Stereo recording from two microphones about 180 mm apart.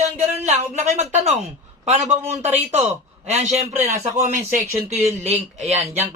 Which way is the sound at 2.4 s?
35° right (ahead or behind).